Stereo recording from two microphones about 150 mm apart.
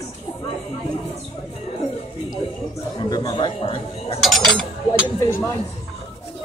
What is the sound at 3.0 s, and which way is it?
Speech, 25° left (ahead or behind).